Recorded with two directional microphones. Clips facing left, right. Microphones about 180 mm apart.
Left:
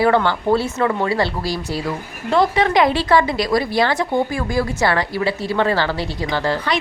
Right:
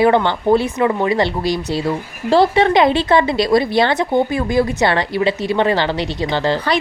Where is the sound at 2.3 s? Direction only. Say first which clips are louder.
Right 4 dB; 30° right (ahead or behind).